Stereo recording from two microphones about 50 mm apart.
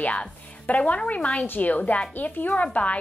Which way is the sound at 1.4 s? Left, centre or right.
Left.